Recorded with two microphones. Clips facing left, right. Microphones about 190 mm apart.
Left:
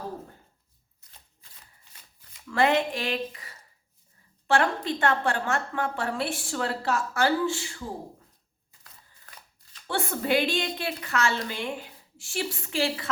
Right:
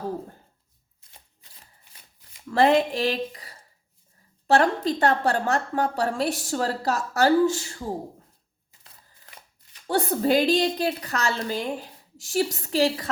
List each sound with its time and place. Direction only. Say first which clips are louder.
2.5 s a woman's voice: right 4 dB; 35° right (ahead or behind)
9.8 s a woman's voice: right 6 dB; 40° right (ahead or behind)